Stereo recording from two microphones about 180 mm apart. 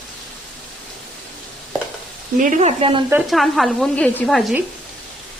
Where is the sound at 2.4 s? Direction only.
45° right (ahead or behind).